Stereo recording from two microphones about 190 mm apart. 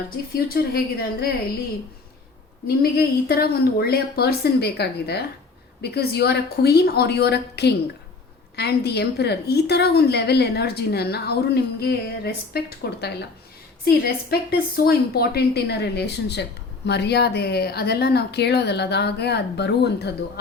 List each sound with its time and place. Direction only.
0.3 s a woman's voice: 55° left (ahead or behind)
2.6 s a woman's voice: 55° left (ahead or behind)